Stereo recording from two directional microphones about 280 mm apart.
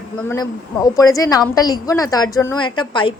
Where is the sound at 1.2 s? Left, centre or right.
Centre.